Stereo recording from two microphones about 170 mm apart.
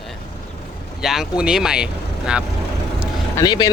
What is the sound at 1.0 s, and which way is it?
Speech, centre (ahead or behind).